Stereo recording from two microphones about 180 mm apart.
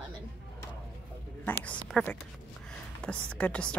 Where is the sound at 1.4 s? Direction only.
5° left (ahead or behind).